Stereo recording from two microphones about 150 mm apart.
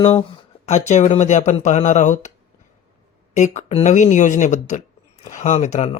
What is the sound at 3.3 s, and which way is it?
Speech, 50° left (ahead or behind).